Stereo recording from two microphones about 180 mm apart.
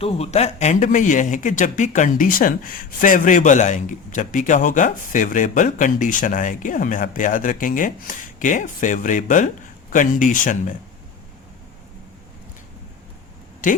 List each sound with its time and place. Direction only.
0.0 s speech: 35° left (ahead or behind)